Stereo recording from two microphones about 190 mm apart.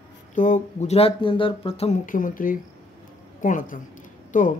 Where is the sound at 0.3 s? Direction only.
40° left (ahead or behind).